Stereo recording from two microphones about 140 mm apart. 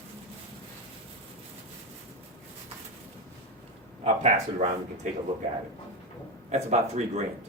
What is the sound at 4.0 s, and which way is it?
Speech, 45° right (ahead or behind).